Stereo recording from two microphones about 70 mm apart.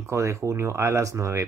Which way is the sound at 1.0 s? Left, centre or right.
Right.